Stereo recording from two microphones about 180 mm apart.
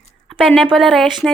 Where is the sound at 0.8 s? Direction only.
Centre (ahead or behind).